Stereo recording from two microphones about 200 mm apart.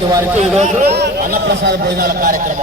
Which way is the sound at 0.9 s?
55° right (ahead or behind).